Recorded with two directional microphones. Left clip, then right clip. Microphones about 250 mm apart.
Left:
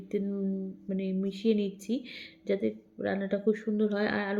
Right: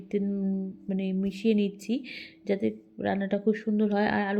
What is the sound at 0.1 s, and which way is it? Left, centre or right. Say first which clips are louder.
A woman's voice: right 2 dB; right.